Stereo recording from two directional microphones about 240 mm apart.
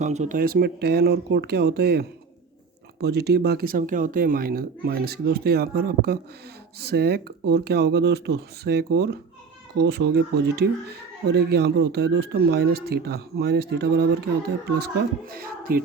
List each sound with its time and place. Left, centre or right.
0.0 s speech: right